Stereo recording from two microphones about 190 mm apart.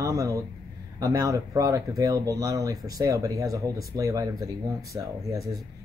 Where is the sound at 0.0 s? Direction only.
15° right (ahead or behind).